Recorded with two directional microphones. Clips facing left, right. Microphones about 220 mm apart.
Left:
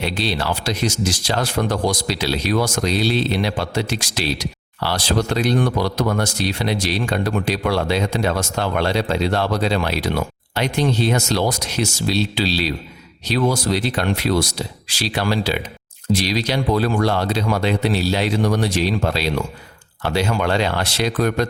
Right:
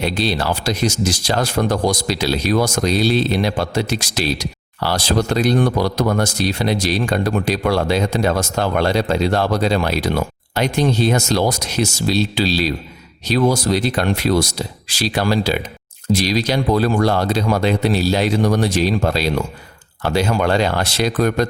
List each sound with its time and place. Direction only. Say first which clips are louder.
0.0 s speech: right 3 dB; 45° right (ahead or behind)